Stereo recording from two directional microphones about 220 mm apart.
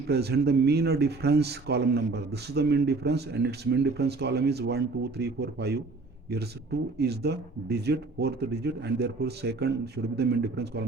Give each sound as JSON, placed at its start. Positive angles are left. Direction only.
{"t": 0.1, "sound": "a man's voice", "side_deg": -45}
{"t": 7.0, "sound": "a man's voice", "side_deg": -50}